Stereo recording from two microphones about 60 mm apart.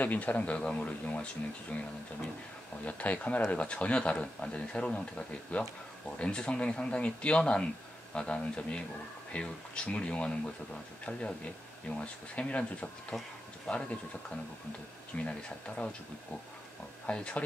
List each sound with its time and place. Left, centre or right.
0.0 s speech: left
2.8 s speech: left
13.1 s speech: centre
13.7 s speech: centre
17.0 s speech: centre